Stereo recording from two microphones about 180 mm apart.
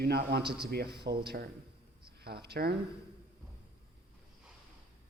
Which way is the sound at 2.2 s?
65° right (ahead or behind).